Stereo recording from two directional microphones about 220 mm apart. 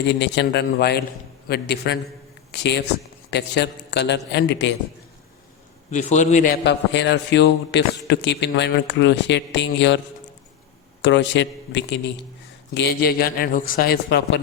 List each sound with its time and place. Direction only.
0.1 s a man's voice: 50° left (ahead or behind)
5.9 s a man's voice: 30° left (ahead or behind)
6.7 s a man's voice: 55° left (ahead or behind)
11.0 s a man's voice: 55° left (ahead or behind)